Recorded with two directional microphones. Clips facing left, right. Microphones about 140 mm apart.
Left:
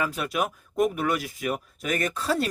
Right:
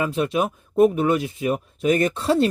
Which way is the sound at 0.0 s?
25° right (ahead or behind).